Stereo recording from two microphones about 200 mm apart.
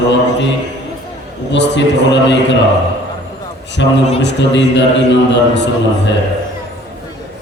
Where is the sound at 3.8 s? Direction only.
65° left (ahead or behind).